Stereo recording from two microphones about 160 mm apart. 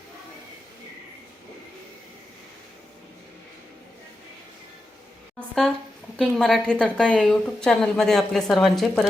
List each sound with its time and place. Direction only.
6.1 s speech: centre (ahead or behind)